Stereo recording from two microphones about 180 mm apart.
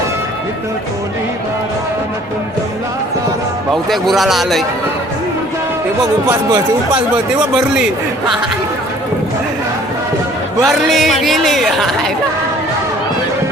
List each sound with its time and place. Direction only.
3.8 s a man's voice: centre (ahead or behind)
6.2 s speech: 20° right (ahead or behind)
10.6 s a man's voice: centre (ahead or behind)